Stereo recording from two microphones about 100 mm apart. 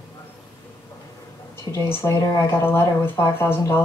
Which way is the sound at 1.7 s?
25° left (ahead or behind).